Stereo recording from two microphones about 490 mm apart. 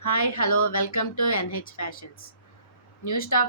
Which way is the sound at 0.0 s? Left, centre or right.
Left.